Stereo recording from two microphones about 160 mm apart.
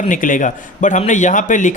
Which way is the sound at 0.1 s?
55° left (ahead or behind).